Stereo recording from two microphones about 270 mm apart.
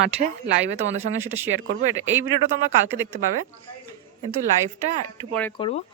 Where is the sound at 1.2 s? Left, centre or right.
Centre.